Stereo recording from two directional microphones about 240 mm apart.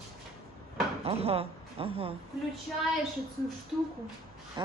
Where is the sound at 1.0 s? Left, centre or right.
Right.